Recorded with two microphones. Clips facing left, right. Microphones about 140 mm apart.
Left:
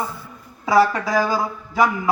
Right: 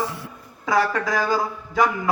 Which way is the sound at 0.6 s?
5° left (ahead or behind).